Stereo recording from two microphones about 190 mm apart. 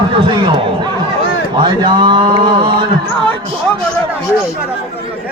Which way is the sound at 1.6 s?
25° right (ahead or behind).